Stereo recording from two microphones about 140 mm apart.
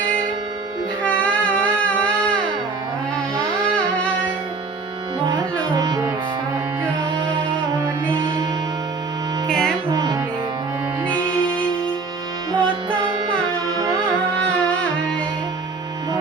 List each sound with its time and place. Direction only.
1.0 s a sound: 10° left (ahead or behind)
5.7 s music: 30° right (ahead or behind)
7.2 s music: 35° right (ahead or behind)
9.5 s music: 5° left (ahead or behind)
9.9 s music: 30° right (ahead or behind)
12.5 s music: 35° right (ahead or behind)
14.3 s music: 10° left (ahead or behind)